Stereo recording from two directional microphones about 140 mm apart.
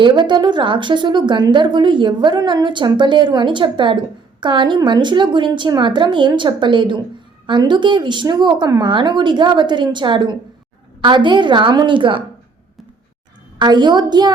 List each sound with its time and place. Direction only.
0.0 s speech: 35° right (ahead or behind)
13.6 s speech: 30° right (ahead or behind)